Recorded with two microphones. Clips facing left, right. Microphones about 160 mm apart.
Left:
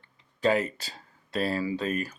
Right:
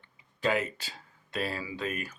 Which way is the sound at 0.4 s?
35° left (ahead or behind).